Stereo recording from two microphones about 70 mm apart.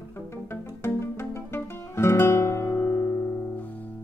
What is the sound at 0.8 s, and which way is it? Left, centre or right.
Guitar, left.